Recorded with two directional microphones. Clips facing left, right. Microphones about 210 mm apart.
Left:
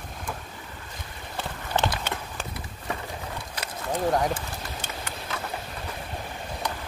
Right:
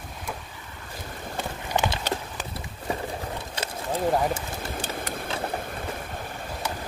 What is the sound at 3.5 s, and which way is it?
Boat, 25° right (ahead or behind).